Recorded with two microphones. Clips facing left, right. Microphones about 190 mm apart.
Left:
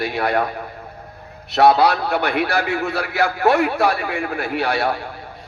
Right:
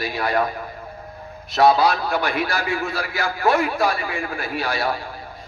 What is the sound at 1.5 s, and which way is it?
A man's voice, 65° left (ahead or behind).